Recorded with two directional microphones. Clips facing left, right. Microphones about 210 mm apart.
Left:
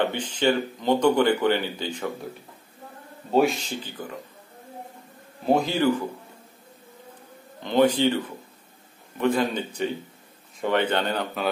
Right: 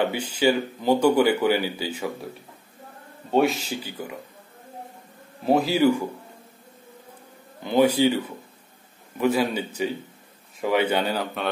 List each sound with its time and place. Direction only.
0.0 s speech: 10° right (ahead or behind)
3.3 s speech: centre (ahead or behind)
5.4 s speech: 5° right (ahead or behind)
7.6 s speech: 10° right (ahead or behind)